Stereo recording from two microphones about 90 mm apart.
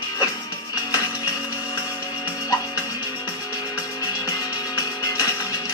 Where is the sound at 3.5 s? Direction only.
40° left (ahead or behind).